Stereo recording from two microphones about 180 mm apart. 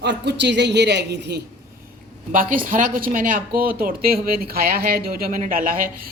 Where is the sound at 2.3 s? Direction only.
50° right (ahead or behind).